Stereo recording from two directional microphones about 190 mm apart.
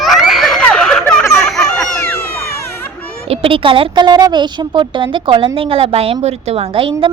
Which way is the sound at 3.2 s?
30° right (ahead or behind).